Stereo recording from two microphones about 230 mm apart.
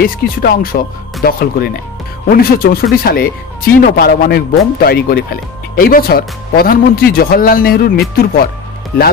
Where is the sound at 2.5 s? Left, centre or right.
Left.